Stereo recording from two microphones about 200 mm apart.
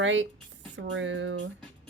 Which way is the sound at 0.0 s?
70° right (ahead or behind).